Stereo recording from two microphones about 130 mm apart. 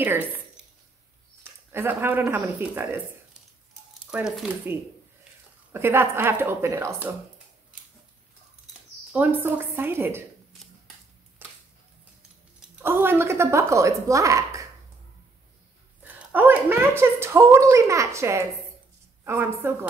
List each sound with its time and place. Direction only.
0.0 s speech: 20° right (ahead or behind)
1.7 s speech: 15° right (ahead or behind)
4.1 s speech: 5° right (ahead or behind)
5.7 s speech: 20° right (ahead or behind)
9.1 s speech: 15° right (ahead or behind)
11.4 s a sound: 15° right (ahead or behind)
12.8 s a woman's voice: 20° right (ahead or behind)
16.0 s a woman's voice: 15° right (ahead or behind)